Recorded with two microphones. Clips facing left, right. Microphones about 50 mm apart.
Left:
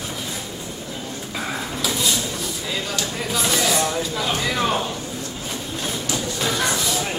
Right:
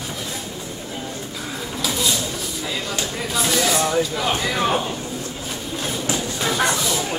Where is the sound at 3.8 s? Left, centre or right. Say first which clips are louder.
Right 3 dB; centre.